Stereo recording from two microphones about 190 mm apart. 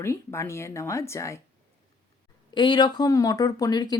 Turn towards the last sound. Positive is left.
turn(degrees=20)  # may be behind; listen again after turning